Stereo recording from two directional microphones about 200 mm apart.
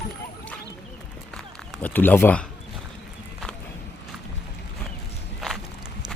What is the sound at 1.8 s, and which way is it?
Speech, 10° left (ahead or behind).